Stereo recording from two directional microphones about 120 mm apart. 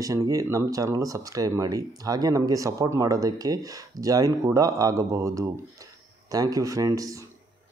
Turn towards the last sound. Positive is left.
turn(degrees=-30)  # may be behind; listen again after turning